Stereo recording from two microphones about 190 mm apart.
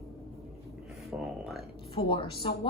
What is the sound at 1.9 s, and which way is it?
Speech, 30° left (ahead or behind).